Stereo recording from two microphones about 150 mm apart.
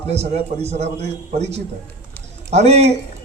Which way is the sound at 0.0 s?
45° right (ahead or behind).